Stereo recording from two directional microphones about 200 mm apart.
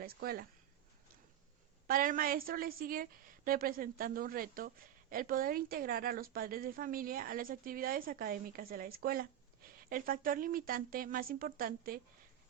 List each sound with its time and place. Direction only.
0.0 s speech: 50° right (ahead or behind)
1.9 s a woman's voice: 45° right (ahead or behind)